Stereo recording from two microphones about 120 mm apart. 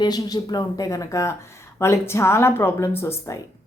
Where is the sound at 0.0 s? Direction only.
35° left (ahead or behind).